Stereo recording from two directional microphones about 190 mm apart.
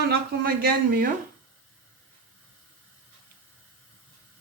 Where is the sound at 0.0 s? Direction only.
55° right (ahead or behind).